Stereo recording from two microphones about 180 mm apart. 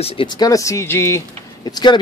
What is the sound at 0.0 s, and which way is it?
Speech, 30° left (ahead or behind).